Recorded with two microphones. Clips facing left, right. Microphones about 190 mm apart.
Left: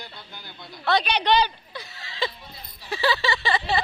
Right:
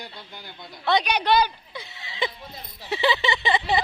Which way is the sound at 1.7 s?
15° right (ahead or behind).